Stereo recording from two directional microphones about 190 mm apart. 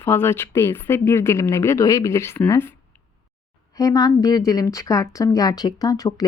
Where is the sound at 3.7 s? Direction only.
20° left (ahead or behind).